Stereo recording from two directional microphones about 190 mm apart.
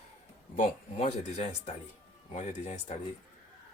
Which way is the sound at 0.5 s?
40° left (ahead or behind).